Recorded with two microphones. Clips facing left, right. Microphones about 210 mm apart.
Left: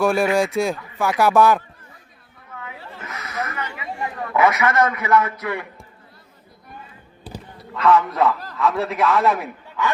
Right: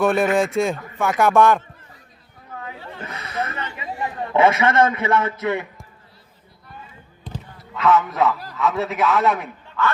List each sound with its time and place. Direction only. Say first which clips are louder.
0.0 s a man's voice: even; centre (ahead or behind)
3.0 s a sound: right 2 dB; 30° right (ahead or behind)
3.8 s a man's voice: right 4 dB; 25° right (ahead or behind)
7.6 s a man's voice: left 1 dB; centre (ahead or behind)
9.8 s speech: right 1 dB; 15° left (ahead or behind)